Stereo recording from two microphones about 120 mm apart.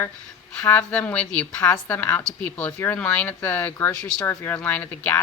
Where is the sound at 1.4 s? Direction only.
25° left (ahead or behind).